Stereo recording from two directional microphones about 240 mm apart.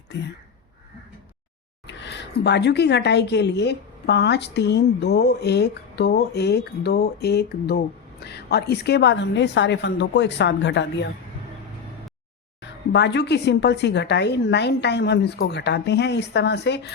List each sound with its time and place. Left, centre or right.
1.9 s a woman's voice: left
12.9 s a woman's voice: left